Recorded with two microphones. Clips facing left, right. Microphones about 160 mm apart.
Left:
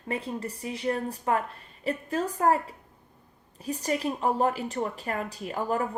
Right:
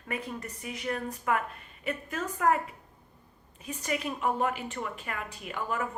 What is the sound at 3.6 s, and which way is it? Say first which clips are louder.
A woman's voice: left 5 dB; 35° left (ahead or behind).